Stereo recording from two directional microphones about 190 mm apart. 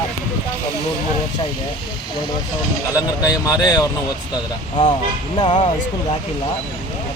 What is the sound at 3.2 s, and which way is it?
Speech, 15° left (ahead or behind).